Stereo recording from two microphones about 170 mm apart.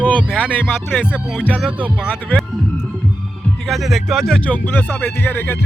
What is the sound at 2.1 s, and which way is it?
Speech, 5° left (ahead or behind).